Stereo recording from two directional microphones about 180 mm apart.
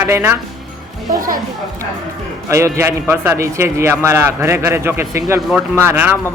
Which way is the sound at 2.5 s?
15° right (ahead or behind).